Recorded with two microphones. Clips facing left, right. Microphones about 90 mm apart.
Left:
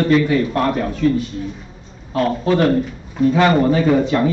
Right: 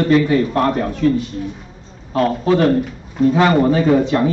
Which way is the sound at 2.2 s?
25° right (ahead or behind).